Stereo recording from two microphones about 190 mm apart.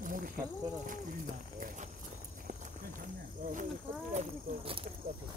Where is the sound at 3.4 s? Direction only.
45° right (ahead or behind).